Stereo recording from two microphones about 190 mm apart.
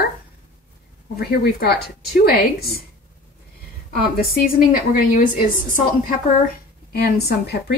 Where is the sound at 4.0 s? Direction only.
50° left (ahead or behind).